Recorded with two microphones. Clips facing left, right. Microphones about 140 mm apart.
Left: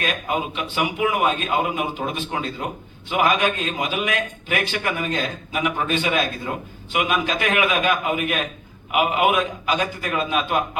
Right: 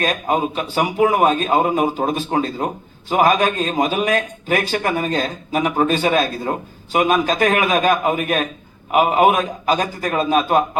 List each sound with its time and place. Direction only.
0.0 s a man's voice: 40° right (ahead or behind)